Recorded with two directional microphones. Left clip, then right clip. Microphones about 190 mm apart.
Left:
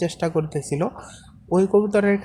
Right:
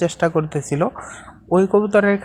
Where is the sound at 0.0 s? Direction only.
20° right (ahead or behind).